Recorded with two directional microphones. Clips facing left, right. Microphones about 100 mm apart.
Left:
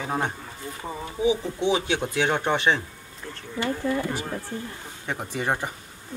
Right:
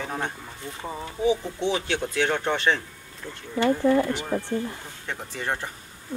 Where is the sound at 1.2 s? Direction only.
15° left (ahead or behind).